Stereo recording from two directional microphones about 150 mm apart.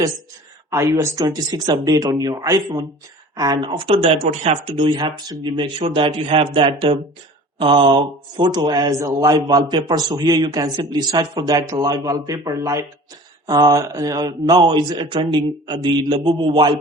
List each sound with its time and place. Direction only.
0.7 s speech: 20° right (ahead or behind)